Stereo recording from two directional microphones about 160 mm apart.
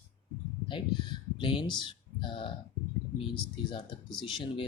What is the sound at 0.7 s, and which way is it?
Speech, 30° left (ahead or behind).